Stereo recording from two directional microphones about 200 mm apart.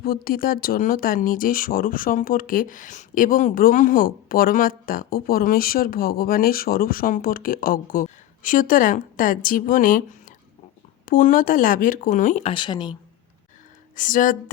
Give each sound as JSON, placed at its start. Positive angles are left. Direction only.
{"t": 0.0, "sound": "speech", "side_deg": 50}
{"t": 13.9, "sound": "speech", "side_deg": 40}